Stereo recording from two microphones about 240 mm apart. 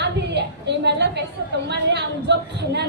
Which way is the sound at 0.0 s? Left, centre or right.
Right.